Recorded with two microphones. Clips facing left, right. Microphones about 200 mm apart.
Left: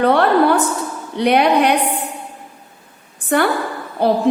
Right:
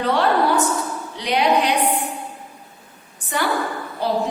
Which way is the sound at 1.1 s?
60° left (ahead or behind).